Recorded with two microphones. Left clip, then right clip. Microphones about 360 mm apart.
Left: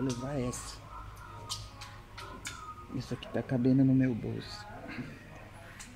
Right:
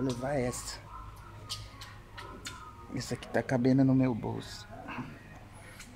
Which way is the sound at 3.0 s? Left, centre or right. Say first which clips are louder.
Right 5 dB; right.